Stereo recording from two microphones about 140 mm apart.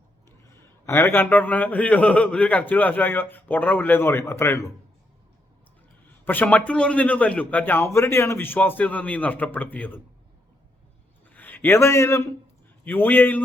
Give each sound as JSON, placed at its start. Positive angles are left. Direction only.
{"t": 0.9, "sound": "a man's voice", "side_deg": 20}
{"t": 6.1, "sound": "a man's voice", "side_deg": 15}
{"t": 11.3, "sound": "a man's voice", "side_deg": 15}